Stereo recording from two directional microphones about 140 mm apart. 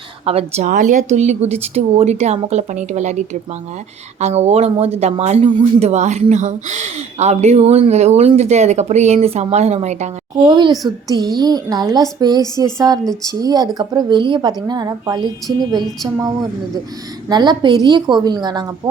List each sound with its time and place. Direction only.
0.3 s speech: 45° right (ahead or behind)
0.7 s speech: 65° right (ahead or behind)
10.4 s a woman's voice: 30° right (ahead or behind)
17.2 s a woman's voice: 30° right (ahead or behind)